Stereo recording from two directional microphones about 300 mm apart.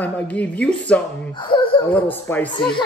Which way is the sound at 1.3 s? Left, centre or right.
Centre.